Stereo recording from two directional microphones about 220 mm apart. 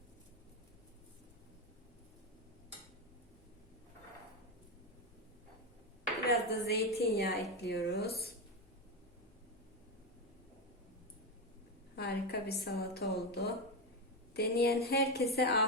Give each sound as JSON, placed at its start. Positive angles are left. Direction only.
{"t": 6.2, "sound": "a woman's voice", "side_deg": 45}
{"t": 11.9, "sound": "a woman's voice", "side_deg": 45}